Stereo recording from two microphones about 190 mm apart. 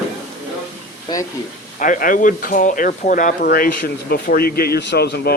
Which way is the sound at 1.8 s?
45° left (ahead or behind).